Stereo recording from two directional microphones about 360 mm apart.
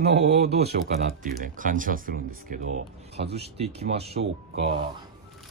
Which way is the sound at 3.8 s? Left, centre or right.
Right.